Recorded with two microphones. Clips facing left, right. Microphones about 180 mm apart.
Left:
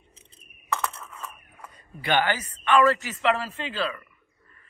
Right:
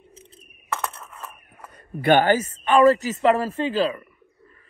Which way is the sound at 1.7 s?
55° right (ahead or behind).